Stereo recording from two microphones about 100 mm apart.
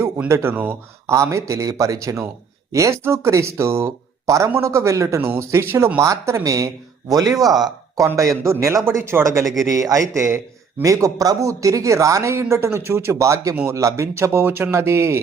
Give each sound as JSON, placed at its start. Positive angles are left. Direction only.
{"t": 0.3, "sound": "speech", "side_deg": -25}
{"t": 1.1, "sound": "a man's voice", "side_deg": -30}